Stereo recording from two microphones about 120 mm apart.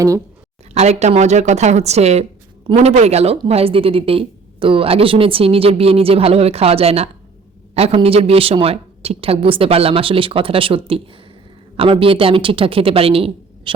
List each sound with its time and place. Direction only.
0.7 s speech: 70° right (ahead or behind); by 13.7 s 50° right (ahead or behind)